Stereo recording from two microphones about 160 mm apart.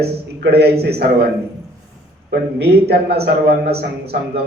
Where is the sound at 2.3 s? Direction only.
90° right.